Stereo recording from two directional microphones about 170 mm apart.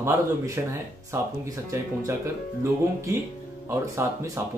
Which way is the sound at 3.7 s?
15° right (ahead or behind).